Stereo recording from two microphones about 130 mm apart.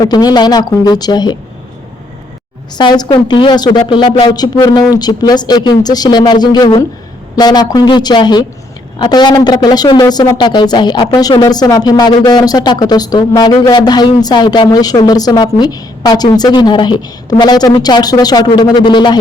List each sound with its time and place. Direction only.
0.0 s a man's voice: 30° left (ahead or behind)
2.7 s a man's voice: 35° left (ahead or behind)